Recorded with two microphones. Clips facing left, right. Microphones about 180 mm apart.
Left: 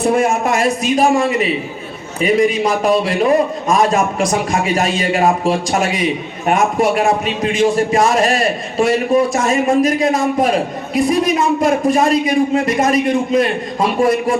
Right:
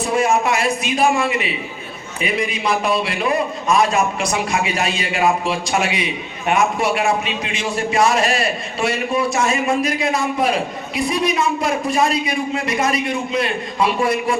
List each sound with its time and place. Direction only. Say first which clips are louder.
0.0 s a man's voice: left 3 dB; 50° left (ahead or behind)